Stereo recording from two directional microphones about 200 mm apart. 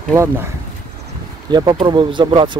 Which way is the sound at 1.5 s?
20° right (ahead or behind).